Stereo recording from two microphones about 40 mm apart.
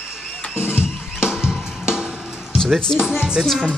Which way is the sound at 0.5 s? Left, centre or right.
Left.